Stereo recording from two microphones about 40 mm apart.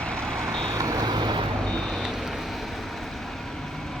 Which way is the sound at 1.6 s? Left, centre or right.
Centre.